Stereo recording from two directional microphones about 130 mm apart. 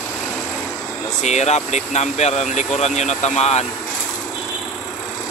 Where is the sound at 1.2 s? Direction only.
60° left (ahead or behind).